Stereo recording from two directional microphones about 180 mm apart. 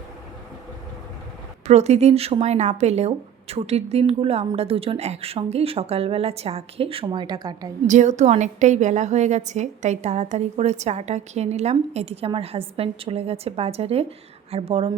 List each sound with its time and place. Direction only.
1.6 s a woman's voice: 40° right (ahead or behind); by 7.7 s 20° right (ahead or behind)
7.9 s a woman's voice: 40° right (ahead or behind)